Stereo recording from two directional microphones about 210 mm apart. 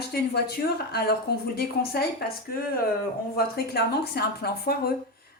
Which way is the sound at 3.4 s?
50° left (ahead or behind).